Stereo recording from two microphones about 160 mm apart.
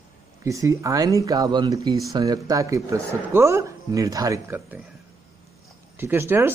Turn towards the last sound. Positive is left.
turn(degrees=-15)  # may be behind; listen again after turning